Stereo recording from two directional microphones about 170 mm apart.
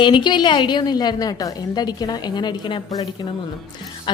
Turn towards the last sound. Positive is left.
turn(degrees=30)  # may be behind; listen again after turning